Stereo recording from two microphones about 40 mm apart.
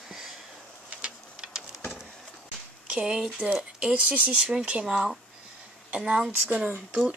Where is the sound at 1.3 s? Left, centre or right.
Centre.